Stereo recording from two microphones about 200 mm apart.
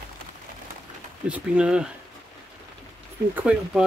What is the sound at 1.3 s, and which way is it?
Speech, 5° right (ahead or behind).